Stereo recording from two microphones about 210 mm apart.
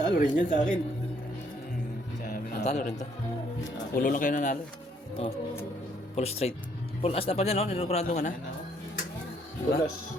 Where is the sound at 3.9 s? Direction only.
40° left (ahead or behind).